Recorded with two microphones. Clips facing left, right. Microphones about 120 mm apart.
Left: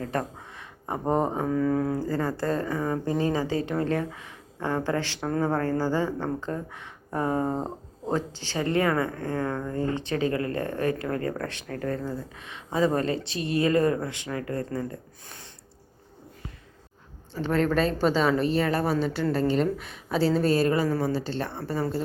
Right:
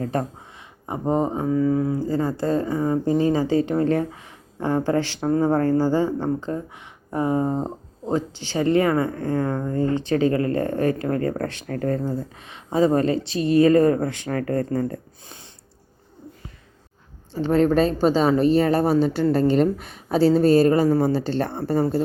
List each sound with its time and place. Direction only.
0.0 s a sound: 25° right (ahead or behind)
1.0 s speech: 5° right (ahead or behind)
2.0 s speech: 20° right (ahead or behind)
7.5 s a sound: centre (ahead or behind)
8.3 s speech: 35° left (ahead or behind)
8.5 s speech: 25° right (ahead or behind); by 15.0 s 45° right (ahead or behind)
17.3 s speech: 30° right (ahead or behind); by 21.6 s 45° right (ahead or behind)